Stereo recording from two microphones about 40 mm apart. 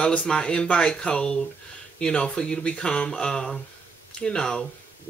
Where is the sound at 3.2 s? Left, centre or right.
Centre.